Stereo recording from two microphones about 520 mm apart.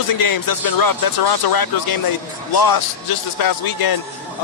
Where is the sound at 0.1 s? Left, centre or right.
Left.